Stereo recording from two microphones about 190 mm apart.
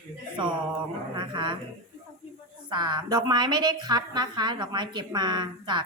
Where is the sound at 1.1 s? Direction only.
25° right (ahead or behind).